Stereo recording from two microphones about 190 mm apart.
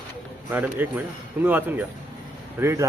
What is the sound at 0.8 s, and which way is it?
Speech, 10° right (ahead or behind).